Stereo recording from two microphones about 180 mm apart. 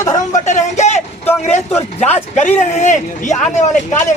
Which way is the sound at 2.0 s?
40° left (ahead or behind).